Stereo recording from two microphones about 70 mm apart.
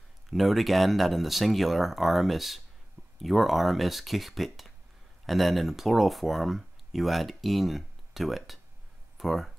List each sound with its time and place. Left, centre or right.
0.3 s speech: centre